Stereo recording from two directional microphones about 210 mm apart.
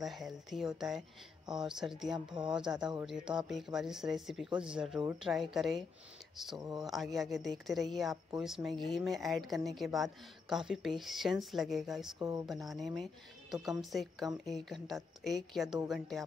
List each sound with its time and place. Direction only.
0.0 s speech: centre (ahead or behind)
2.1 s a woman's voice: 20° right (ahead or behind)
2.5 s speech: 5° right (ahead or behind)
12.2 s speech: 15° right (ahead or behind)
12.4 s speech: centre (ahead or behind)